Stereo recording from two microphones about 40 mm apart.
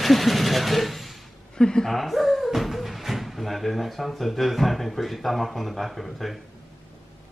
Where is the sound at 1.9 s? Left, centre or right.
Centre.